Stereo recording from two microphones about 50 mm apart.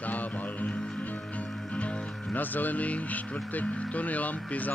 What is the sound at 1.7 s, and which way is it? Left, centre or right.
Speech, left.